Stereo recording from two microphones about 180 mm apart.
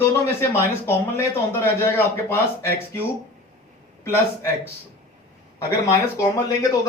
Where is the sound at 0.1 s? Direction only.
15° left (ahead or behind).